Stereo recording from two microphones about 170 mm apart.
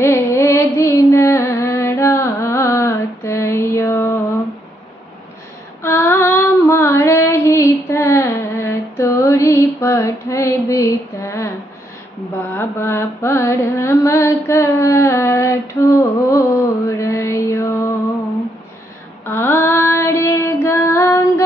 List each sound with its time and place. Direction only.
0.0 s music: 15° left (ahead or behind)
5.8 s female singing: 15° left (ahead or behind)
12.4 s carnatic music: 15° left (ahead or behind)
19.2 s female singing: 15° left (ahead or behind)